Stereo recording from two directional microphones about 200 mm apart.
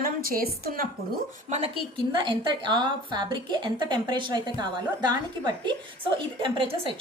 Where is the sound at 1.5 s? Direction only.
35° right (ahead or behind).